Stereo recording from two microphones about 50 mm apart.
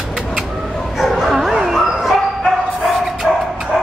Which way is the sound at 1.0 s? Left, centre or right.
Centre.